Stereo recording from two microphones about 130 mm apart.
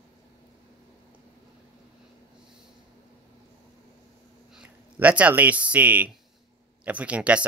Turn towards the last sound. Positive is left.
turn(degrees=-10)  # may be behind; listen again after turning